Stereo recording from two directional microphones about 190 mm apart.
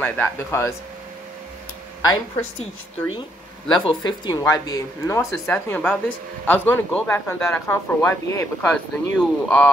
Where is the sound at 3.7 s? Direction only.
25° left (ahead or behind).